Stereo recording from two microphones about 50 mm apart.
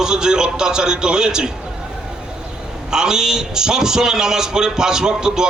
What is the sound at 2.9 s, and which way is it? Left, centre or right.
A man's voice, centre.